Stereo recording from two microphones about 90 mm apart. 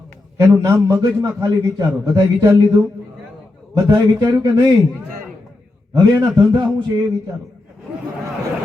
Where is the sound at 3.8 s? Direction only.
40° right (ahead or behind).